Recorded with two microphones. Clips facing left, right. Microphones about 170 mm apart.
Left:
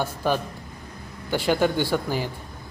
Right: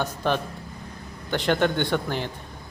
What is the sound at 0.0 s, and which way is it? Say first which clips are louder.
Speech: left 1 dB; 10° left (ahead or behind).